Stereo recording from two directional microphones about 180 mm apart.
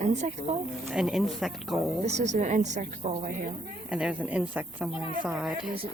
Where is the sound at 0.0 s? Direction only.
40° right (ahead or behind).